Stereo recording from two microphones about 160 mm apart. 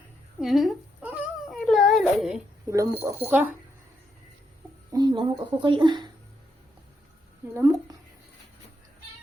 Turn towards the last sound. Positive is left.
turn(degrees=-15)  # may be behind; listen again after turning